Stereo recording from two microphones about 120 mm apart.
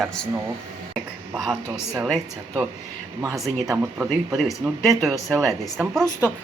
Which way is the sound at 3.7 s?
15° right (ahead or behind).